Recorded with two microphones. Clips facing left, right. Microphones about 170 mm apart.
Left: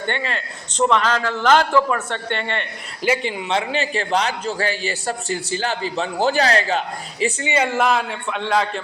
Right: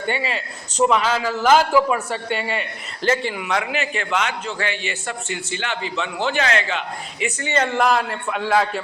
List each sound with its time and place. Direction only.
0.0 s a man's voice: 5° right (ahead or behind)
3.0 s speech: 10° left (ahead or behind)
3.3 s a man's voice: 25° left (ahead or behind)
7.4 s a man's voice: 10° left (ahead or behind)